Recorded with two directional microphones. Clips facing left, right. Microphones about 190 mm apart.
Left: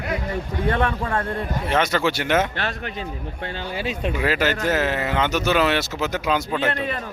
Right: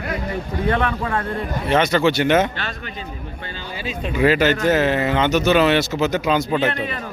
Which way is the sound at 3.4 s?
65° left (ahead or behind).